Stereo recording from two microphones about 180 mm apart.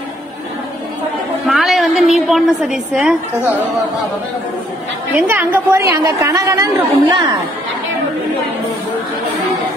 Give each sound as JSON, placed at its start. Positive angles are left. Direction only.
{"t": 1.5, "sound": "a woman's voice", "side_deg": 0}
{"t": 5.2, "sound": "a woman's voice", "side_deg": -10}